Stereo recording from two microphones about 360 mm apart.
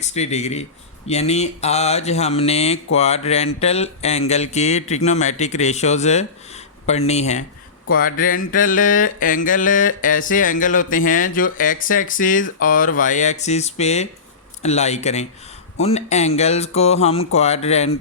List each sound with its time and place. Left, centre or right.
0.0 s speech: centre
7.9 s a sound: left
14.6 s speech: centre